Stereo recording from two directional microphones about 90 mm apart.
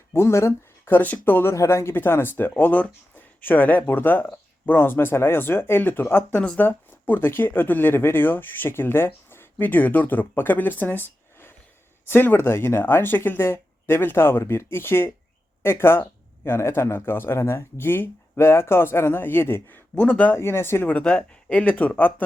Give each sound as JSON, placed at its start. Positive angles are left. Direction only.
{"t": 0.1, "sound": "speech", "side_deg": 30}
{"t": 6.4, "sound": "speech", "side_deg": 10}
{"t": 6.7, "sound": "speech", "side_deg": 25}
{"t": 20.4, "sound": "speech", "side_deg": 30}
{"t": 20.8, "sound": "speech", "side_deg": 15}